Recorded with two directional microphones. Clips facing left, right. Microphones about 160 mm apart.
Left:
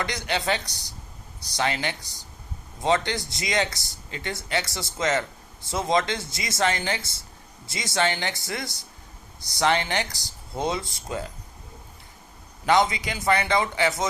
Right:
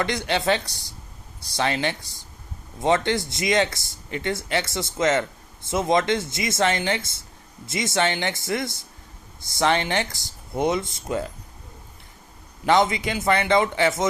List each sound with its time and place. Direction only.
0.0 s speech: 25° right (ahead or behind)
12.6 s speech: 25° right (ahead or behind)